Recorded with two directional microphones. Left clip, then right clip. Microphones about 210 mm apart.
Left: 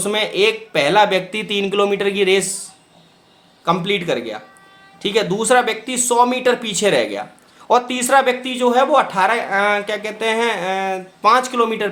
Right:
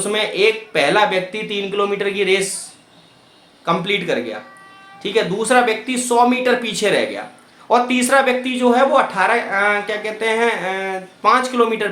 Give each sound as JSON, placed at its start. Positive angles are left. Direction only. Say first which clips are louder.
{"t": 0.0, "sound": "a man's voice", "louder": "even", "side_deg": 30}
{"t": 3.7, "sound": "a man's voice", "louder": "even", "side_deg": 30}